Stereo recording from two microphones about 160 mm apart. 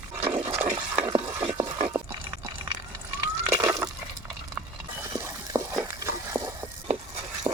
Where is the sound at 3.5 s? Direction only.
20° right (ahead or behind).